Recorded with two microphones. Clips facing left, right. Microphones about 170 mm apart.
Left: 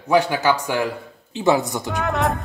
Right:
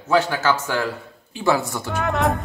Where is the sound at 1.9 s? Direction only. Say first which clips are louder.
Right 1 dB; centre (ahead or behind).